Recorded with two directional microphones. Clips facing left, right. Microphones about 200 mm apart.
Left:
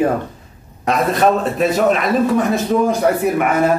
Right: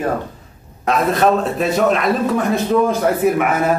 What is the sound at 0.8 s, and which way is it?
A man's voice, centre (ahead or behind).